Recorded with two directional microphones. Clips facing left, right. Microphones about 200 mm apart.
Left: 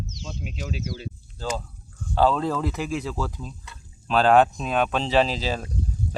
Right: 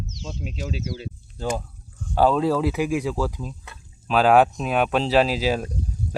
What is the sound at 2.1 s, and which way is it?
Speech, 10° right (ahead or behind).